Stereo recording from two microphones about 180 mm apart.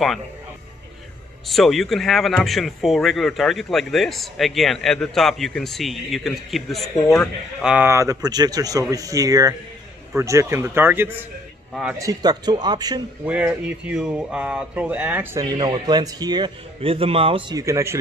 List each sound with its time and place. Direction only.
1.5 s speech: centre (ahead or behind)
12.0 s speech: 20° right (ahead or behind)
13.2 s speech: 10° right (ahead or behind)
15.5 s speech: 25° right (ahead or behind)